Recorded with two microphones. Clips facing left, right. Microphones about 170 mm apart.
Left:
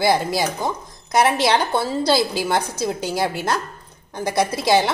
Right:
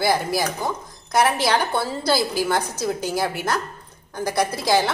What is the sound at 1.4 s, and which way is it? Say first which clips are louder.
A woman's voice: left 2 dB; 20° left (ahead or behind).